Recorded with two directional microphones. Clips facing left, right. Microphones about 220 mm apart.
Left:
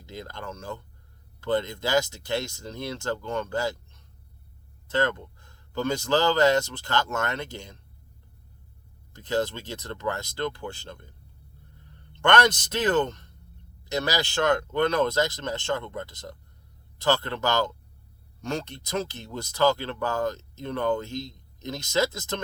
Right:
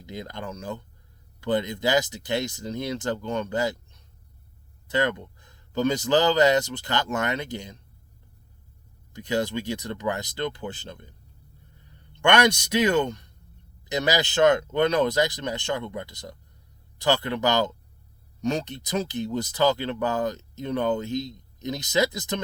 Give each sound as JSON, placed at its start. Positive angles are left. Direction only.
{"t": 0.0, "sound": "speech", "side_deg": -15}
{"t": 4.9, "sound": "speech", "side_deg": -15}
{"t": 9.1, "sound": "speech", "side_deg": -15}
{"t": 12.2, "sound": "speech", "side_deg": -15}